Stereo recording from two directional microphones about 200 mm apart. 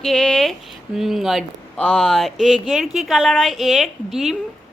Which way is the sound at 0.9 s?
Centre (ahead or behind).